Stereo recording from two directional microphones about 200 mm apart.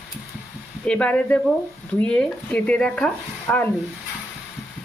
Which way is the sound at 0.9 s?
5° left (ahead or behind).